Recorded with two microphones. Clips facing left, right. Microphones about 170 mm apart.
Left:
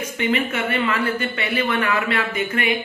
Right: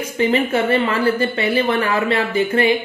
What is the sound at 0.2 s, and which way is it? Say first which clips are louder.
Speech: right 6 dB; 35° right (ahead or behind).